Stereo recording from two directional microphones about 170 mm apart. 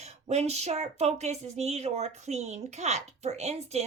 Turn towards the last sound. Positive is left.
turn(degrees=-40)  # may be behind; listen again after turning